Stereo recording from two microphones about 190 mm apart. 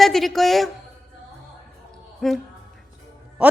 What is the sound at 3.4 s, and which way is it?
Speech, 5° right (ahead or behind).